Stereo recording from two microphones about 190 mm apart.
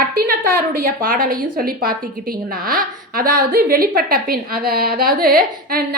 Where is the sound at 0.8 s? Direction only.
45° right (ahead or behind).